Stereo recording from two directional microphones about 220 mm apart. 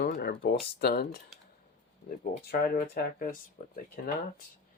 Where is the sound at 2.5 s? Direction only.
40° left (ahead or behind).